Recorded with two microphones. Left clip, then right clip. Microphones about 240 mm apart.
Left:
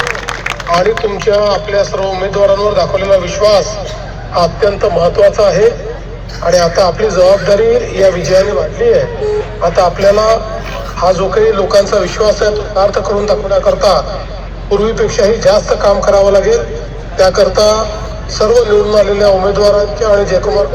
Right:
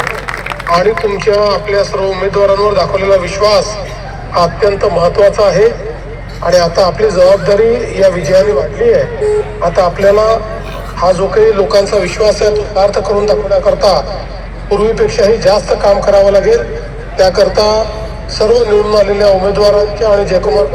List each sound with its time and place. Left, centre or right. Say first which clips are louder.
0.7 s speech: right 1 dB; right